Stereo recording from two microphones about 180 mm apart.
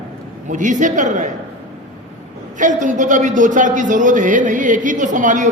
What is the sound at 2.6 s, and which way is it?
A woman's voice, 45° right (ahead or behind).